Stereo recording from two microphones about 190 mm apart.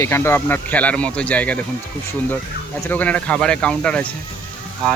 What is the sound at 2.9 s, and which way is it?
Speech, 10° left (ahead or behind).